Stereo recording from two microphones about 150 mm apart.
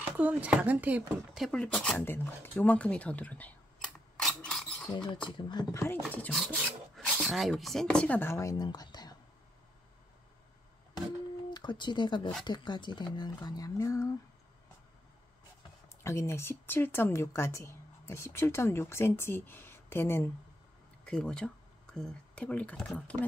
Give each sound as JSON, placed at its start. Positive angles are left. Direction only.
{"t": 0.0, "sound": "speech", "side_deg": -10}
{"t": 1.5, "sound": "a sound", "side_deg": 5}
{"t": 4.8, "sound": "a woman's voice", "side_deg": 30}
{"t": 6.4, "sound": "filing", "side_deg": -5}
{"t": 7.2, "sound": "a woman's voice", "side_deg": 0}
{"t": 11.5, "sound": "speech", "side_deg": 30}
{"t": 16.0, "sound": "a woman's voice", "side_deg": 20}
{"t": 21.0, "sound": "a woman's voice", "side_deg": 5}